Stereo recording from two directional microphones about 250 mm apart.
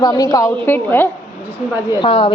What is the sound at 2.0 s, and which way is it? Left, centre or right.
Speech, left.